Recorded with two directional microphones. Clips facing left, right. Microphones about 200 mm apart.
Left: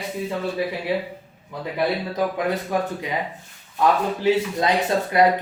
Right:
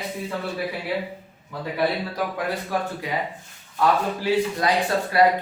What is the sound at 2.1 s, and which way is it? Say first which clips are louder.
Speech: left 4 dB; 20° left (ahead or behind).